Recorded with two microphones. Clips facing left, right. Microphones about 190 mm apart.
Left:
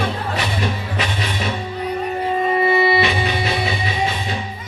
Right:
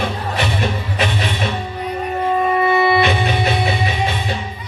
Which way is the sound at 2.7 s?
50° right (ahead or behind).